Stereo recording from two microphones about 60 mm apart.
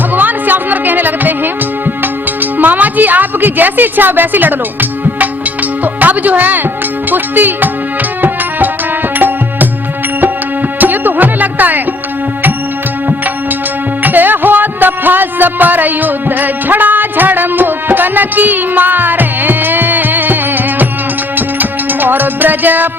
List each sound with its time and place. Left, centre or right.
0.1 s music: right
2.4 s a woman's voice: right
7.1 s music: right
10.8 s music: right
14.0 s music: right